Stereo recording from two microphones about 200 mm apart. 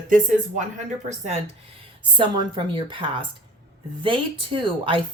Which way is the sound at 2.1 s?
25° right (ahead or behind).